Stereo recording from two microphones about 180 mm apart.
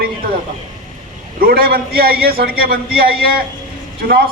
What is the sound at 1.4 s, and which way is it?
A man's voice, 55° right (ahead or behind).